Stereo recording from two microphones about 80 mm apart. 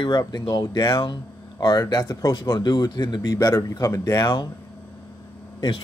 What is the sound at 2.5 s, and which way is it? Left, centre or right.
Speech, left.